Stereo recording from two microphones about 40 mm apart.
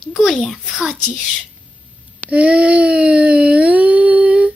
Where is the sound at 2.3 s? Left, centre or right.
Right.